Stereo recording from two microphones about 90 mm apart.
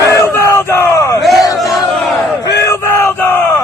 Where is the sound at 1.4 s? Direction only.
40° left (ahead or behind).